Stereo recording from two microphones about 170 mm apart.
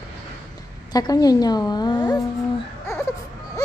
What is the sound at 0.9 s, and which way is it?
A woman's voice, 20° left (ahead or behind).